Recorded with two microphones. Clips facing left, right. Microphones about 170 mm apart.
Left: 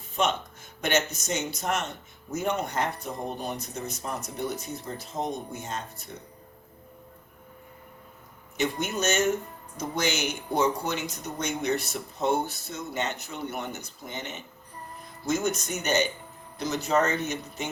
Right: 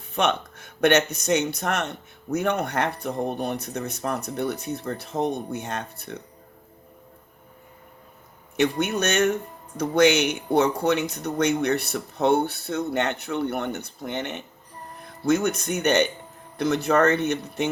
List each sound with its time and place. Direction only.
0.1 s speech: 65° right (ahead or behind)
8.5 s speech: 65° right (ahead or behind)